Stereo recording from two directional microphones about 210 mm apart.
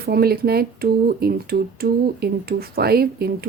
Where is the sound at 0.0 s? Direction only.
50° right (ahead or behind).